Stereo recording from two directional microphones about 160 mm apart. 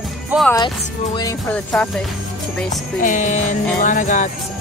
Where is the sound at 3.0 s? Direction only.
50° left (ahead or behind).